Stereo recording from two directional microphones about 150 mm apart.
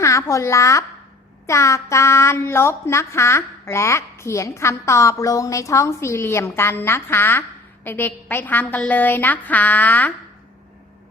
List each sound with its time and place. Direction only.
0.0 s a woman's voice: 20° left (ahead or behind)